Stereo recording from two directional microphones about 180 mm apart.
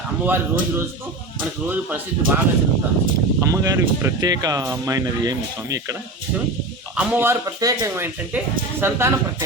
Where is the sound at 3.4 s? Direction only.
20° right (ahead or behind).